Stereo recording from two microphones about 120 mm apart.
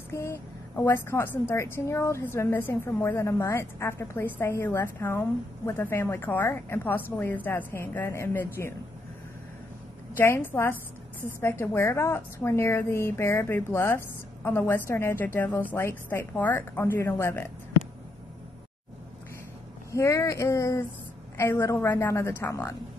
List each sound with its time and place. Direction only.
0.1 s a woman's voice: 25° left (ahead or behind)
10.1 s a woman's voice: 20° left (ahead or behind)
19.9 s a woman's voice: 25° left (ahead or behind)